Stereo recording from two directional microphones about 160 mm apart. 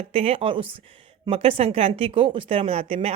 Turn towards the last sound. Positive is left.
turn(degrees=-40)  # may be behind; listen again after turning